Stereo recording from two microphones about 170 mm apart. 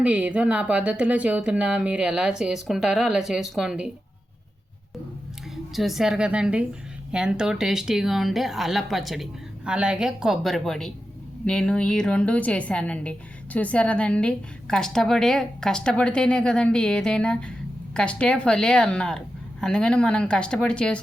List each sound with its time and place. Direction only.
0.0 s speech: 5° right (ahead or behind)
5.7 s a woman's voice: centre (ahead or behind)